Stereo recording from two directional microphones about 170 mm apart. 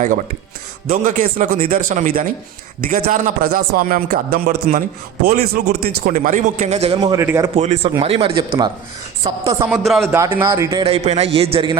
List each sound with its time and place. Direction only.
0.9 s a man's voice: 50° right (ahead or behind); by 7.2 s 30° right (ahead or behind)
7.2 s a man's voice: 15° right (ahead or behind)
7.5 s speech: 40° right (ahead or behind)
9.6 s a man's voice: 5° right (ahead or behind)
10.1 s a man's voice: 15° right (ahead or behind)
10.8 s speech: 40° right (ahead or behind)